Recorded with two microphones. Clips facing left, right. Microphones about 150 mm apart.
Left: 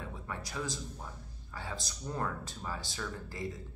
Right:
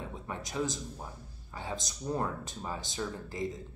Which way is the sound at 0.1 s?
20° right (ahead or behind).